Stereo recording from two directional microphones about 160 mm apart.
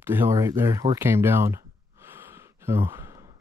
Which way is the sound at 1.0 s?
15° right (ahead or behind).